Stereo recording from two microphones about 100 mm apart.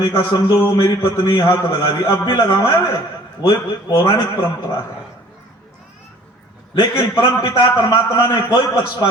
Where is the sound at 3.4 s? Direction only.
40° left (ahead or behind).